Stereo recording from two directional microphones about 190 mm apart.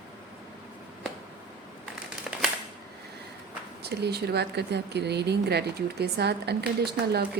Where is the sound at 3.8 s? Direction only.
60° right (ahead or behind).